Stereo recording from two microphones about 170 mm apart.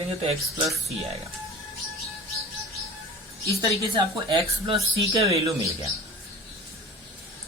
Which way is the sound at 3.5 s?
30° right (ahead or behind).